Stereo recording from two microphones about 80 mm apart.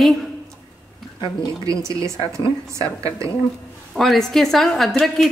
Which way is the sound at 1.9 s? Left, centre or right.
Right.